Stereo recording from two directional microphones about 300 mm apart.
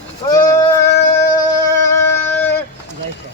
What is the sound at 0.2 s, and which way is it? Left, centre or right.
Speech, centre.